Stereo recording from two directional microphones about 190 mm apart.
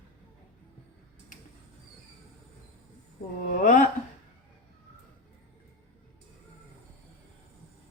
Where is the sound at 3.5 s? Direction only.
45° left (ahead or behind).